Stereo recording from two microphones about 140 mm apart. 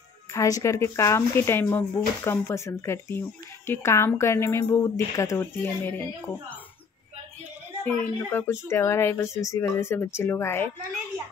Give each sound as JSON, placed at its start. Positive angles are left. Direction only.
{"t": 0.3, "sound": "speech", "side_deg": 25}
{"t": 7.8, "sound": "speech", "side_deg": 15}